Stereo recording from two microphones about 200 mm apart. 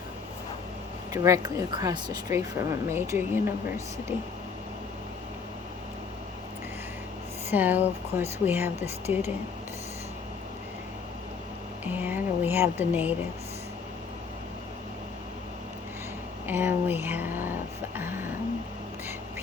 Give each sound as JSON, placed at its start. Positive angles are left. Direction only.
{"t": 1.1, "sound": "speech", "side_deg": -15}
{"t": 7.5, "sound": "speech", "side_deg": -10}
{"t": 11.9, "sound": "speech", "side_deg": -10}
{"t": 16.5, "sound": "speech", "side_deg": -10}
{"t": 17.9, "sound": "a sound", "side_deg": -10}